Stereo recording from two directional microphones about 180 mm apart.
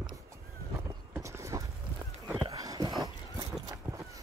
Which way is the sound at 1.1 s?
15° right (ahead or behind).